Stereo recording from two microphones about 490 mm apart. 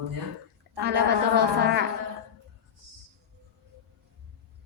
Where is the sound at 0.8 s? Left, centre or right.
Centre.